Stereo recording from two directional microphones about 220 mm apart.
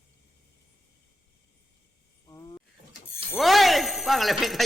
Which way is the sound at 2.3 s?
15° left (ahead or behind).